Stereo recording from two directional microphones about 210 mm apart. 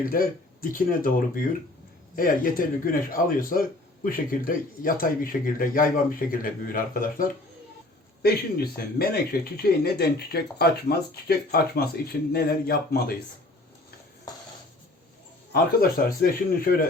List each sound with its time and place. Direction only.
0.1 s speech: 45° left (ahead or behind)
15.5 s speech: 45° left (ahead or behind)